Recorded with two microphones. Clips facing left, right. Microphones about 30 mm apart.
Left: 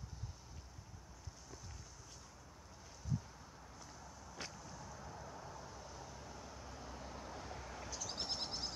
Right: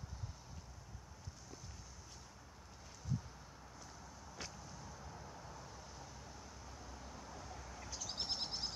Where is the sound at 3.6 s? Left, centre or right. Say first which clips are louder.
Left 1 dB; centre; by 7.9 s left.